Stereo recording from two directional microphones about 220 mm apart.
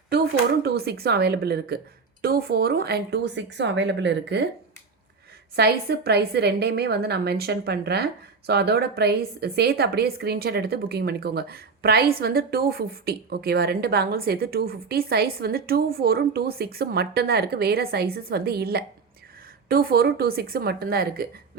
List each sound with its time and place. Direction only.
0.1 s a woman's voice: 50° right (ahead or behind)
5.5 s a woman's voice: 45° right (ahead or behind)